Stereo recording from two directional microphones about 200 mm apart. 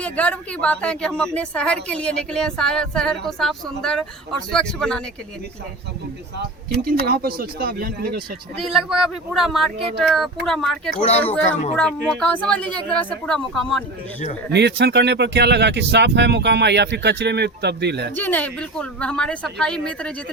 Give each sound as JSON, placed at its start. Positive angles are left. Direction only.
{"t": 0.0, "sound": "a woman's voice", "side_deg": 5}
{"t": 6.8, "sound": "speech", "side_deg": -50}
{"t": 8.6, "sound": "a woman's voice", "side_deg": 0}
{"t": 14.5, "sound": "speech", "side_deg": -55}
{"t": 18.1, "sound": "a woman's voice", "side_deg": 10}